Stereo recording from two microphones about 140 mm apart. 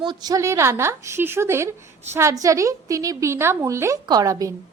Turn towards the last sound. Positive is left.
turn(degrees=-25)  # may be behind; listen again after turning